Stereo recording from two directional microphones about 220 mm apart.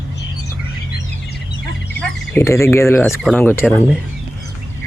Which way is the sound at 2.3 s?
10° left (ahead or behind).